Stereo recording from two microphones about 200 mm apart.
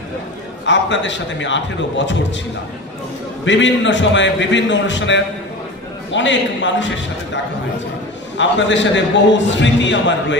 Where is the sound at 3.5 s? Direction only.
65° left (ahead or behind).